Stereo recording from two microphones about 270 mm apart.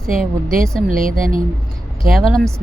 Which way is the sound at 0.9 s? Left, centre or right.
Right.